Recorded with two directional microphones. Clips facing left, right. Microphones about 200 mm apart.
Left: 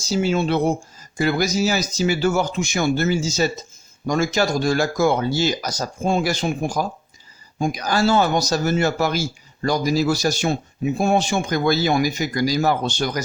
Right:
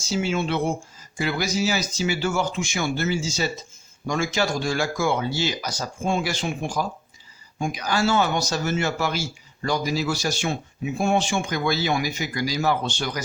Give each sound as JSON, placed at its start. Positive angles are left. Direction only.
{"t": 0.0, "sound": "speech", "side_deg": 40}